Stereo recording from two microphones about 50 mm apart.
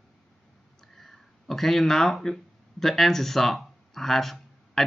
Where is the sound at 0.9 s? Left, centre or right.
Centre.